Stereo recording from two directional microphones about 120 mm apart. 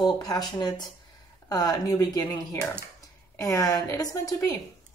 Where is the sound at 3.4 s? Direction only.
30° left (ahead or behind).